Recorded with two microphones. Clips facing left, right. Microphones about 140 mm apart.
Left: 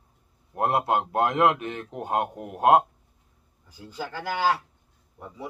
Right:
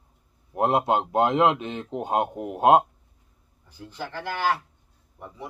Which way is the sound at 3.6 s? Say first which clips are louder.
Even; 10° left (ahead or behind).